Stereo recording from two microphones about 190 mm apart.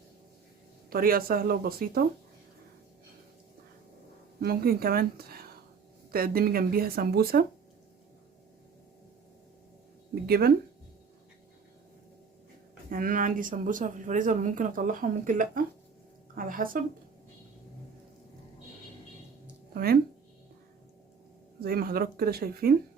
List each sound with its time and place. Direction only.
0.9 s speech: 50° right (ahead or behind)
4.4 s speech: 55° right (ahead or behind)
10.2 s speech: 55° right (ahead or behind)
12.9 s speech: 45° right (ahead or behind)
19.7 s speech: 55° right (ahead or behind)
21.6 s speech: 50° right (ahead or behind)